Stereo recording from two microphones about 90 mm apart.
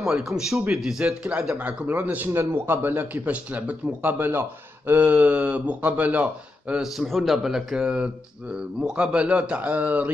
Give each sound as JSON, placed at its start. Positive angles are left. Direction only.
{"t": 0.1, "sound": "a man's voice", "side_deg": 0}
{"t": 6.7, "sound": "a man's voice", "side_deg": -5}